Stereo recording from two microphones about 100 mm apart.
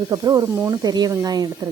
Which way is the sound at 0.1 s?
35° right (ahead or behind).